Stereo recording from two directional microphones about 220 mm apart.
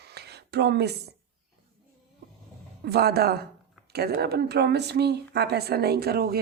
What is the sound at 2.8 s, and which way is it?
Speech, 45° right (ahead or behind).